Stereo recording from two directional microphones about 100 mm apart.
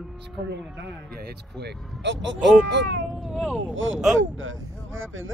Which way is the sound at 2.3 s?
10° right (ahead or behind).